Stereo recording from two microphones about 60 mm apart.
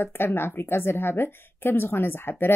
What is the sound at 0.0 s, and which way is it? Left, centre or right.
A woman's voice, left.